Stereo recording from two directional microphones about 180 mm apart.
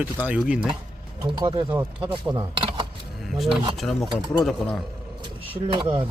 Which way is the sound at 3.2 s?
Centre (ahead or behind).